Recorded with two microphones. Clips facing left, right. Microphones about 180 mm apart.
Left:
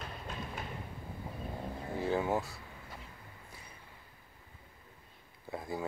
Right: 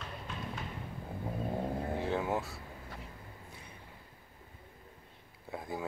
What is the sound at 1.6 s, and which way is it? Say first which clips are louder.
Vehicle: right 4 dB; 45° right (ahead or behind).